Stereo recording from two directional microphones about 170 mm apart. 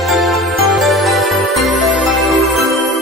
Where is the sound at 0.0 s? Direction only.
Centre (ahead or behind).